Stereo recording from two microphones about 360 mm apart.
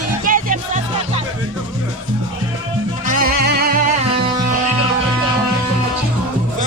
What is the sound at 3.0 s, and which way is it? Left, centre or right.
Music, right.